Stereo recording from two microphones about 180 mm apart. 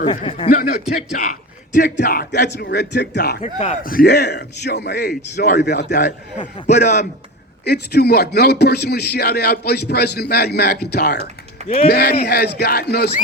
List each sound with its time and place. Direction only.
0.0 s speech: 30° left (ahead or behind)
1.1 s a man's voice: 45° left (ahead or behind); by 3.4 s 65° left (ahead or behind)
3.4 s a man's voice: 35° left (ahead or behind)
3.8 s a man's voice: 60° left (ahead or behind)
6.7 s a man's voice: 40° left (ahead or behind)
7.6 s a man's voice: 65° left (ahead or behind)